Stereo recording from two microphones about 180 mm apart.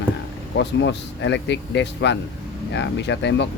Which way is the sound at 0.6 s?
80° left.